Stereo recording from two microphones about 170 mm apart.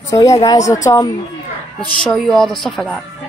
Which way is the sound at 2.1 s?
Centre (ahead or behind).